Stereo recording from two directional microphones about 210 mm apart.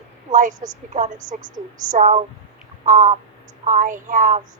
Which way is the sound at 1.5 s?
35° right (ahead or behind).